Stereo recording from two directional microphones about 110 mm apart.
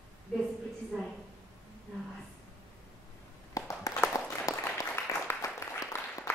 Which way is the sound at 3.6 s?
30° left (ahead or behind).